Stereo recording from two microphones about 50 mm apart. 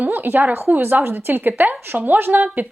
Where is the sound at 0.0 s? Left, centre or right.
Right.